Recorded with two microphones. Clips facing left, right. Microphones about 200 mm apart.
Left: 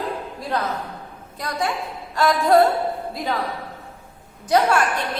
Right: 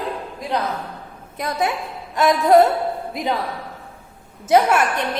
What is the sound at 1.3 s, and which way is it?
A woman's voice, 20° right (ahead or behind).